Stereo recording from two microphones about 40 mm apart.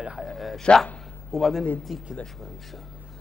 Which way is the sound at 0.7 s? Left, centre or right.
Left.